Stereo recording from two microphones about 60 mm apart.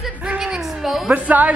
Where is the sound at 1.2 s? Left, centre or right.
Right.